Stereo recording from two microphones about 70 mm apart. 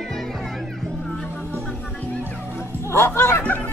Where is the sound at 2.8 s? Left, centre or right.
Left.